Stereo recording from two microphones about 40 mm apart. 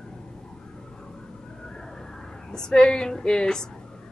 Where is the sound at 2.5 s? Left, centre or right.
Centre.